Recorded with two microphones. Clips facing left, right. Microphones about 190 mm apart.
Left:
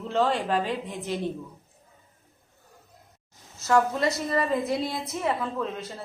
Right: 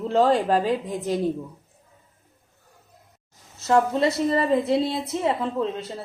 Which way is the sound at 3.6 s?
25° right (ahead or behind).